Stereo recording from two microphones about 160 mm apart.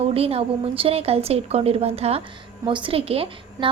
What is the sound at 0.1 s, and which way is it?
A woman's voice, 35° right (ahead or behind).